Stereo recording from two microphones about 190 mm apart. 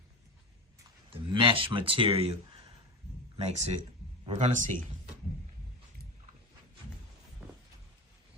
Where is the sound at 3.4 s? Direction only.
35° right (ahead or behind).